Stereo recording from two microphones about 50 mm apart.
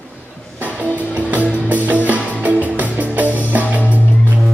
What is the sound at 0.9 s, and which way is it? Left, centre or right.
Music, left.